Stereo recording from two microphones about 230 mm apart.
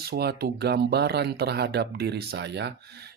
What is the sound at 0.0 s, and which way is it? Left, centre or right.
Speech, right.